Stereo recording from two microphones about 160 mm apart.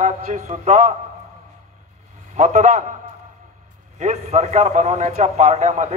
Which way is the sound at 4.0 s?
45° right (ahead or behind).